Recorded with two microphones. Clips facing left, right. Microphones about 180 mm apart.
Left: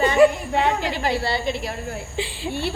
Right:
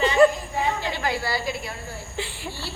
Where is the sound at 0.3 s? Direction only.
70° left (ahead or behind).